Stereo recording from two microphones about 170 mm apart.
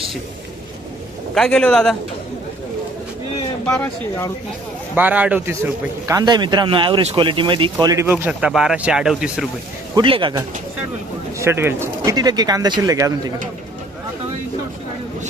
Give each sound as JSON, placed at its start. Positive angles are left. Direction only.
{"t": 1.4, "sound": "a man's voice", "side_deg": 5}
{"t": 3.7, "sound": "speech", "side_deg": 15}
{"t": 4.9, "sound": "a man's voice", "side_deg": -10}
{"t": 9.9, "sound": "speech", "side_deg": -30}
{"t": 11.3, "sound": "speech", "side_deg": -15}